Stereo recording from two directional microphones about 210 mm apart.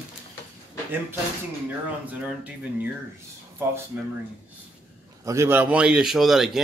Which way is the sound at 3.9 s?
10° right (ahead or behind).